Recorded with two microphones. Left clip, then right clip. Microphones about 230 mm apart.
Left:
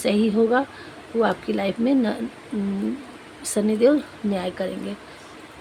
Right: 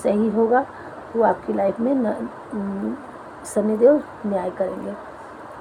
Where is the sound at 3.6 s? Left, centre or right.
Left.